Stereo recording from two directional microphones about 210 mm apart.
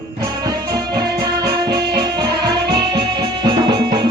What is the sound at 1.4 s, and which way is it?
Music, 20° right (ahead or behind).